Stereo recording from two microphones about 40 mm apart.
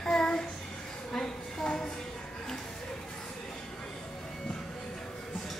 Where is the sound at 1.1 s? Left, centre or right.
Centre.